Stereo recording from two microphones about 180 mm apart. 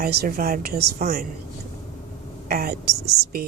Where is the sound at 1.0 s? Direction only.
45° right (ahead or behind).